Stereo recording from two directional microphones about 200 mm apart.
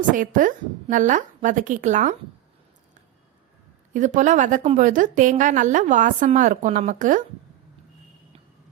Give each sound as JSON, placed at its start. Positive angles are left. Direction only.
{"t": 0.1, "sound": "a woman's voice", "side_deg": -40}
{"t": 3.9, "sound": "a woman's voice", "side_deg": -40}